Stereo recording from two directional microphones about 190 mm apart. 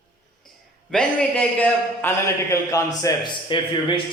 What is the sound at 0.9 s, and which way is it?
A man's voice, 5° left (ahead or behind).